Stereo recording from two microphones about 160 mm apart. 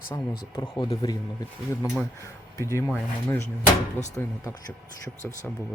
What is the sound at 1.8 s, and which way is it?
Speech, 5° right (ahead or behind).